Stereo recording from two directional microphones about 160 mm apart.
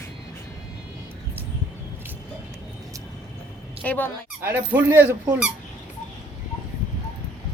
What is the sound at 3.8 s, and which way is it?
Speech, 10° left (ahead or behind).